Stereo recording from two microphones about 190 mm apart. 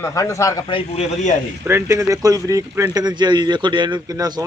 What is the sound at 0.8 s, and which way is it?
Speech, 35° left (ahead or behind).